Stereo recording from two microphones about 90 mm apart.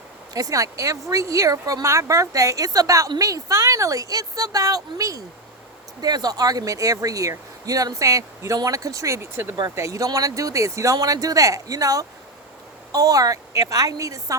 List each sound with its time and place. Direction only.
0.3 s speech: 40° right (ahead or behind)